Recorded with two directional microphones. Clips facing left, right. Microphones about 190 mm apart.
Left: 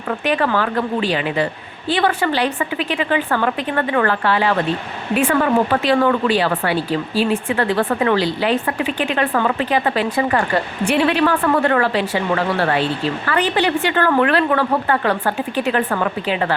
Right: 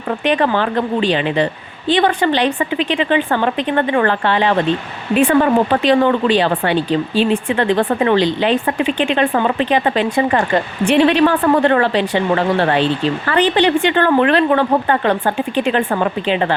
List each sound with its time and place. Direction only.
0.3 s speech: 25° right (ahead or behind)